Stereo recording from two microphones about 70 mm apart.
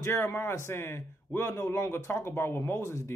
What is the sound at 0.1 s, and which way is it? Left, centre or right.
Speech, left.